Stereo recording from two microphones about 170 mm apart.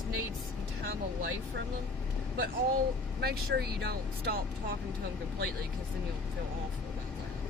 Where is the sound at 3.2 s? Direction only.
70° right (ahead or behind).